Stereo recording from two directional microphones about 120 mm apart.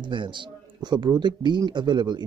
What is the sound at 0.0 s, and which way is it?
Speech, 40° right (ahead or behind).